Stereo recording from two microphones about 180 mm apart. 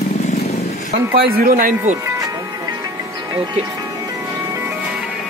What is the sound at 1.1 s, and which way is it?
Speech, 55° right (ahead or behind).